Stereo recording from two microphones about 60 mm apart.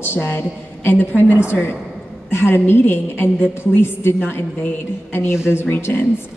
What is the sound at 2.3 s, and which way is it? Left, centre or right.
A woman's voice, left.